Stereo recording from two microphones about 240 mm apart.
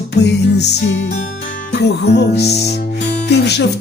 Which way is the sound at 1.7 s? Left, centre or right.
Left.